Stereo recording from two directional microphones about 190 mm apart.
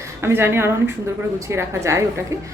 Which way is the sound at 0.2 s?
15° right (ahead or behind).